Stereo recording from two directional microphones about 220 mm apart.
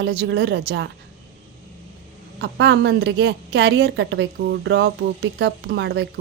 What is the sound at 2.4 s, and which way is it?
A woman's voice, 50° right (ahead or behind).